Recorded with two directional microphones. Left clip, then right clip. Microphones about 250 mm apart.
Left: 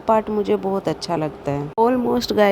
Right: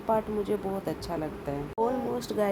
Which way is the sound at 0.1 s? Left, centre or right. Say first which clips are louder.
Left 10 dB; left.